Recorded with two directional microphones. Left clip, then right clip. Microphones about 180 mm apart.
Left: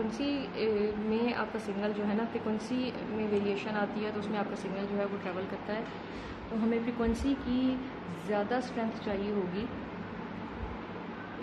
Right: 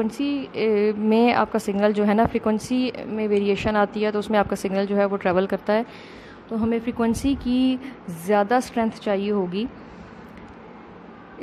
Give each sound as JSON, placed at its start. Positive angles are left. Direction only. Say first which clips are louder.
{"t": 0.2, "sound": "a woman's voice", "louder": "right 7 dB", "side_deg": -45}